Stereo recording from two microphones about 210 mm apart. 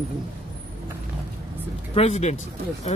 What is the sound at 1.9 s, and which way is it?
Speech, 30° left (ahead or behind).